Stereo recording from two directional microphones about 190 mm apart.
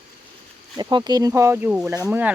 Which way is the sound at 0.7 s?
20° right (ahead or behind).